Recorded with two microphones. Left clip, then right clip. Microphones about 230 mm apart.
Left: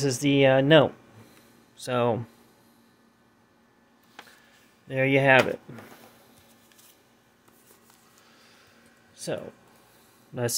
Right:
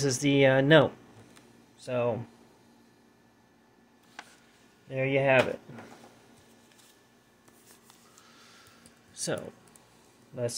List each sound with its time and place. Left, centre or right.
0.0 s speech: centre
1.8 s speech: left
4.8 s speech: left
9.1 s a sound: centre